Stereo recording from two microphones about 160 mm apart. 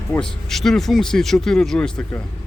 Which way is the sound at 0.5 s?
Centre (ahead or behind).